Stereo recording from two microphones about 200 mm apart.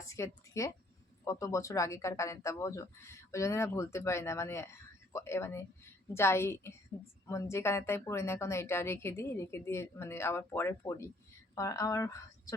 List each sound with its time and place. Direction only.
0.0 s a woman's voice: 15° left (ahead or behind)